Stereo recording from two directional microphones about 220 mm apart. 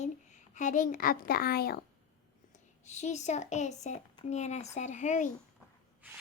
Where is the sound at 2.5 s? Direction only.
30° left (ahead or behind).